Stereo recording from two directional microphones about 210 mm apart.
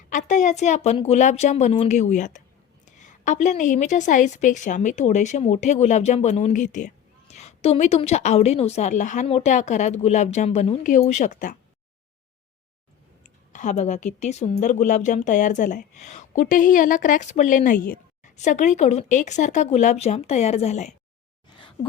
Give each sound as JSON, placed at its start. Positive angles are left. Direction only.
{"t": 0.1, "sound": "speech", "side_deg": 35}
{"t": 13.2, "sound": "speech", "side_deg": 35}